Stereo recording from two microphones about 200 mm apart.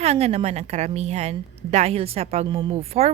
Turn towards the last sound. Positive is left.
turn(degrees=-30)  # may be behind; listen again after turning